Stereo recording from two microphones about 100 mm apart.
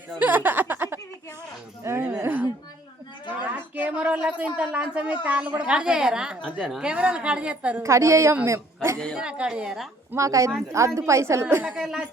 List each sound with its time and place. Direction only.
0.2 s a sound: 20° right (ahead or behind)
5.2 s a woman's voice: 15° right (ahead or behind)
7.8 s a woman's voice: 30° right (ahead or behind)
9.1 s a woman's voice: 10° right (ahead or behind)
10.2 s a woman's voice: 30° right (ahead or behind)
11.6 s a woman's voice: 5° right (ahead or behind)